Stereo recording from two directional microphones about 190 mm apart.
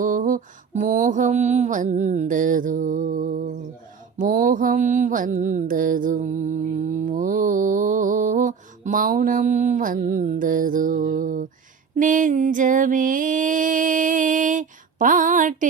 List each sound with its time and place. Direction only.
0.0 s mantra: 45° right (ahead or behind)